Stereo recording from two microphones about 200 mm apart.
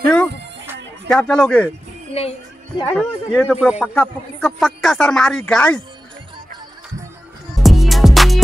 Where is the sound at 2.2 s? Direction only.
30° left (ahead or behind).